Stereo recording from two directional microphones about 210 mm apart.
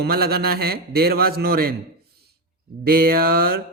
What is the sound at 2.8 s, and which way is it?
Speech, 45° right (ahead or behind).